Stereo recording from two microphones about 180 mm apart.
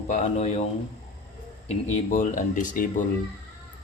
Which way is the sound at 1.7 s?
40° left (ahead or behind).